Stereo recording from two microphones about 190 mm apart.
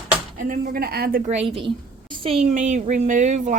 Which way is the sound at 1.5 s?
25° right (ahead or behind).